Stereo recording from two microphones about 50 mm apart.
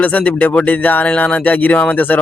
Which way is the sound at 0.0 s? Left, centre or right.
Left.